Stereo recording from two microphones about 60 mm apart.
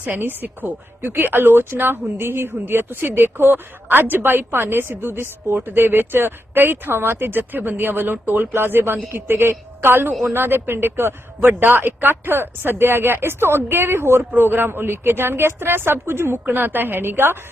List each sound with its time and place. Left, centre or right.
0.0 s speech: right